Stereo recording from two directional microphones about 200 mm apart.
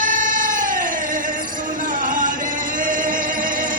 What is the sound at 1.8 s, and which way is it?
Music, 40° right (ahead or behind).